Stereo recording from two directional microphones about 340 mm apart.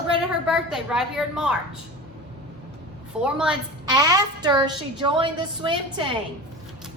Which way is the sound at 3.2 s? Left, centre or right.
Centre.